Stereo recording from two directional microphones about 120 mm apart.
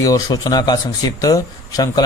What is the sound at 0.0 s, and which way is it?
A man's voice, 30° left (ahead or behind).